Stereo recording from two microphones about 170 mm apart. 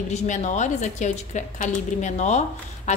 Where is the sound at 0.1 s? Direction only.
45° left (ahead or behind).